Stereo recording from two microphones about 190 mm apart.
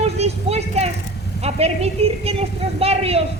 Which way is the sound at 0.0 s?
35° right (ahead or behind).